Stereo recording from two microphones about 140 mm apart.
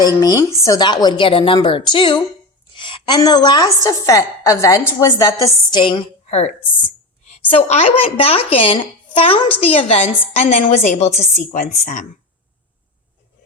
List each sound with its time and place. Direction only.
0.0 s a woman's voice: 25° left (ahead or behind)
2.7 s a sound: 35° left (ahead or behind)
3.2 s a woman's voice: 30° left (ahead or behind)
5.8 s a woman's voice: 40° left (ahead or behind)
11.6 s speech: 70° left (ahead or behind)